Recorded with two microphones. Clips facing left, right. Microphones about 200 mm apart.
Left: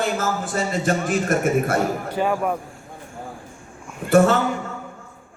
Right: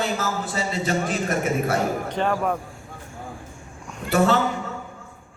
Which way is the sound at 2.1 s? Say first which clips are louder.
Left 2 dB; 10° left (ahead or behind).